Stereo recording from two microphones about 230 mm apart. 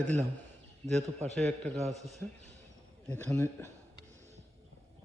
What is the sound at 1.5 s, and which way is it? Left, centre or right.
Speech, right.